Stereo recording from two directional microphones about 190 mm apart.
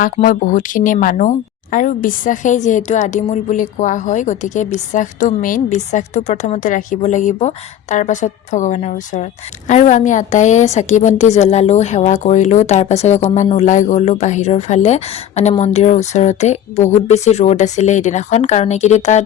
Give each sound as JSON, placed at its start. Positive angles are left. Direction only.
{"t": 0.0, "sound": "speech", "side_deg": 45}